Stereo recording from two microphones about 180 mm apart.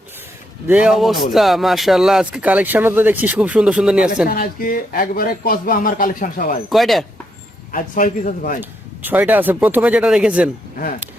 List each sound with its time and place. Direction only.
0.7 s speech: 5° right (ahead or behind)
4.3 s speech: 55° left (ahead or behind)
6.7 s speech: centre (ahead or behind)
7.7 s speech: 50° left (ahead or behind)
9.0 s speech: 10° right (ahead or behind)